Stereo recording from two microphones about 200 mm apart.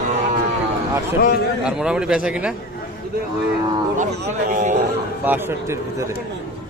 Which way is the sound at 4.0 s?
40° right (ahead or behind).